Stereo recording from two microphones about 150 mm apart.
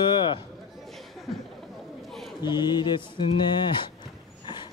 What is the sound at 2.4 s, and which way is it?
Speech, 30° left (ahead or behind).